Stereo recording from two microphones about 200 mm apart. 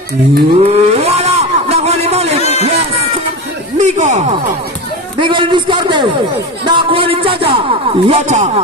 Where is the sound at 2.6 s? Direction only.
30° right (ahead or behind).